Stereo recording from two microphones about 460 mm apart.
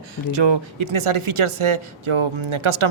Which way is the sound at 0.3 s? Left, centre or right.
Right.